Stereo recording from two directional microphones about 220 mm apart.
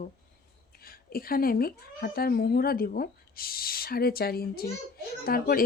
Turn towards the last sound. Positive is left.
turn(degrees=45)  # may be behind; listen again after turning